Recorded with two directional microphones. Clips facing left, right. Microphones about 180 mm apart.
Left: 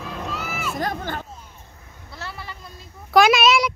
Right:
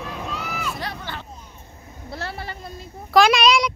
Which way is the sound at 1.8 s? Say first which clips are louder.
Right 5 dB; 30° right (ahead or behind).